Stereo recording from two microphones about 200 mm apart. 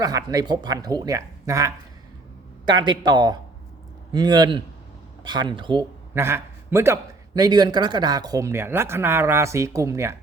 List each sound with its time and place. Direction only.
0.0 s a man's voice: 15° right (ahead or behind)
6.1 s a man's voice: 10° right (ahead or behind)